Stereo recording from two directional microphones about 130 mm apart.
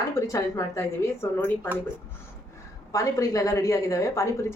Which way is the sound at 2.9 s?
25° left (ahead or behind).